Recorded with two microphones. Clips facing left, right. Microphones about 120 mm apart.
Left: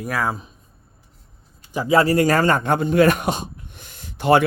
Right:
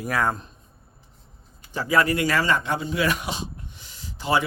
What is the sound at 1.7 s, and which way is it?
A man's voice, 25° left (ahead or behind).